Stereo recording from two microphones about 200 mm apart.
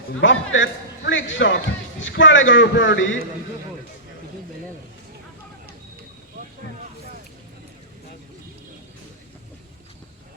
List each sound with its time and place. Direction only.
0.2 s a man's voice: 70° left (ahead or behind)